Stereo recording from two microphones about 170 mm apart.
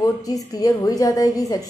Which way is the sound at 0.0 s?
20° left (ahead or behind).